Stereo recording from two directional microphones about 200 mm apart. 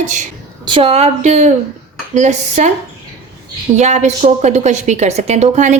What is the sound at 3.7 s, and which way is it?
A woman's voice, 35° right (ahead or behind).